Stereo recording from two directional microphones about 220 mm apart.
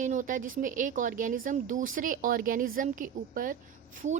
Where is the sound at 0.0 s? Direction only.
35° right (ahead or behind).